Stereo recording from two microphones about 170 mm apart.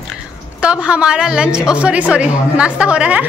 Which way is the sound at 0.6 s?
5° right (ahead or behind).